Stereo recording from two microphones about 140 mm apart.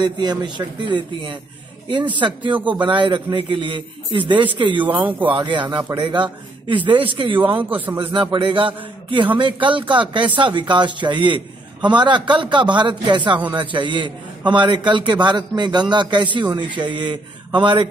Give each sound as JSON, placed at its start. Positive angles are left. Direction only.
{"t": 0.0, "sound": "a man's voice", "side_deg": -30}